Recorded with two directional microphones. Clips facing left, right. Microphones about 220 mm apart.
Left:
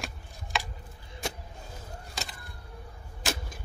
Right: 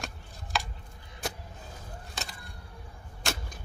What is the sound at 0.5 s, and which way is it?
Chopping, centre (ahead or behind).